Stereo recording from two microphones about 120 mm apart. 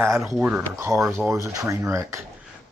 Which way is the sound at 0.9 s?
5° right (ahead or behind).